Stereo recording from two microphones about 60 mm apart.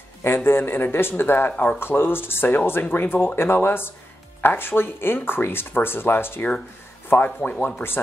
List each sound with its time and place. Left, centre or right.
0.2 s speech: left
7.4 s speech: left